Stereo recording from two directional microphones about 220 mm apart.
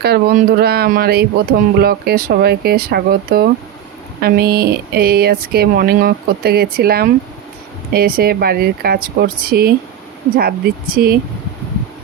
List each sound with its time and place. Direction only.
0.0 s speech: 45° right (ahead or behind)